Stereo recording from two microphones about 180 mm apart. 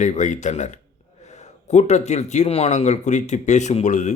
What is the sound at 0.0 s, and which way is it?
Speech, 45° left (ahead or behind).